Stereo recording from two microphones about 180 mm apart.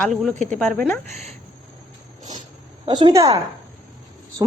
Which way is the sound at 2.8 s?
25° right (ahead or behind).